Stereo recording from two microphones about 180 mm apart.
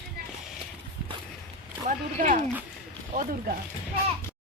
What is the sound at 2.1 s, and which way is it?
Speech, 45° right (ahead or behind).